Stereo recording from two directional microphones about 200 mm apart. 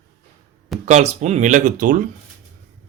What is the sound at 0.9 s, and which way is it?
Speech, 35° right (ahead or behind).